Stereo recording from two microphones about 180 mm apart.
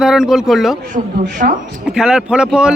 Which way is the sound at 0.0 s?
5° right (ahead or behind).